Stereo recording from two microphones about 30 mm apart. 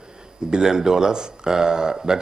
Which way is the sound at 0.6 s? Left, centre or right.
Centre.